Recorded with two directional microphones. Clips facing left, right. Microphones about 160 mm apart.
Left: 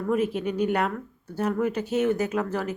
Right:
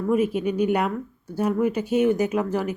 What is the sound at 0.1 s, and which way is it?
A woman's voice, 10° right (ahead or behind).